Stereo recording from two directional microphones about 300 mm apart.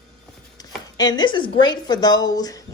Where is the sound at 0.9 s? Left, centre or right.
Centre.